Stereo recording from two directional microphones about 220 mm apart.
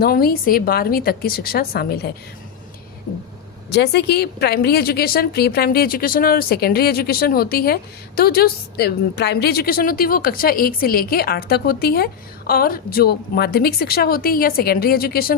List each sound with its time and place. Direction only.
0.0 s a woman's voice: 45° left (ahead or behind)
3.7 s a woman's voice: 50° left (ahead or behind)